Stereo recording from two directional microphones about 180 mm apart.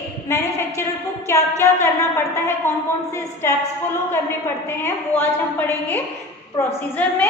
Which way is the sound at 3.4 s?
15° left (ahead or behind).